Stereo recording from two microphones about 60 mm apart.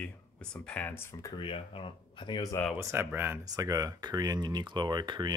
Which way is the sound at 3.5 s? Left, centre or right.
Right.